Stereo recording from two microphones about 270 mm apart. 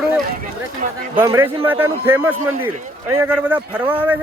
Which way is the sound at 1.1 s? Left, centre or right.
Centre.